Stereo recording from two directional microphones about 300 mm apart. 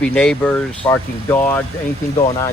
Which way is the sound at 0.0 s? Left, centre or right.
Centre.